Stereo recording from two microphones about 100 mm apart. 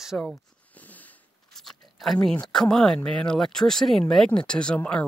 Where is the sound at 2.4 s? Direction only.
5° left (ahead or behind).